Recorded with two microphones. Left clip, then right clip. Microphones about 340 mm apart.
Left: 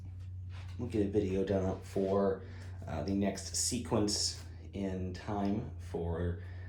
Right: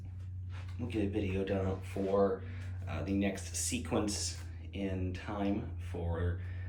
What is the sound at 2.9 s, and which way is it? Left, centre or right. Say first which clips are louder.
Speech: even; left.